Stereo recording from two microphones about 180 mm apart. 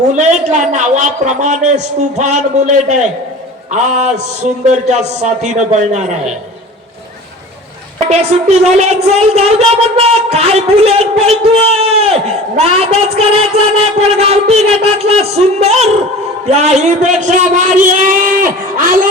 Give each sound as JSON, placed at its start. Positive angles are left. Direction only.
{"t": 0.2, "sound": "speech", "side_deg": -40}
{"t": 8.1, "sound": "a man's voice", "side_deg": -35}